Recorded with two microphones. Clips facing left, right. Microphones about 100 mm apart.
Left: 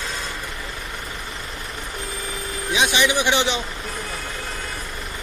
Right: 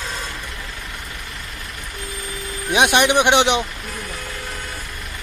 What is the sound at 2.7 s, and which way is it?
Speech, 60° right (ahead or behind).